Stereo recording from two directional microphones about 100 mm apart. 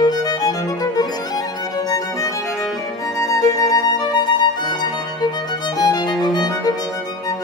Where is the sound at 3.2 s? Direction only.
35° left (ahead or behind).